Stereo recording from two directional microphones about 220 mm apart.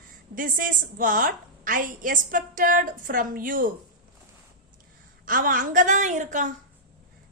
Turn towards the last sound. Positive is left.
turn(degrees=-35)  # may be behind; listen again after turning